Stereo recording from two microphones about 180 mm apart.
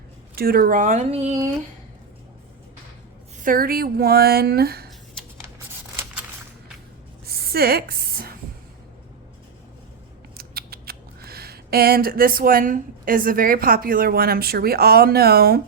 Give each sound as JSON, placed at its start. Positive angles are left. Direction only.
{"t": 0.3, "sound": "speech", "side_deg": -55}
{"t": 3.4, "sound": "speech", "side_deg": -50}
{"t": 7.3, "sound": "a sound", "side_deg": -60}
{"t": 10.3, "sound": "speech", "side_deg": -60}